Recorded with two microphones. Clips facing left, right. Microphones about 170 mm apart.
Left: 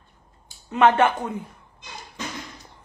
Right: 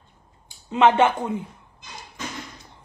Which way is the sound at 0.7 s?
15° right (ahead or behind).